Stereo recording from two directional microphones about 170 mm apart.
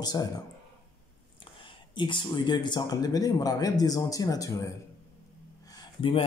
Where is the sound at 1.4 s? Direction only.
30° left (ahead or behind).